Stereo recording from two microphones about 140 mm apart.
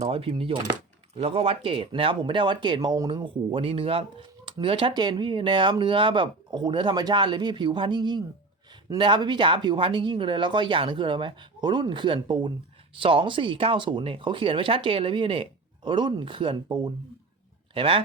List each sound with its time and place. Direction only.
0.0 s speech: 40° right (ahead or behind)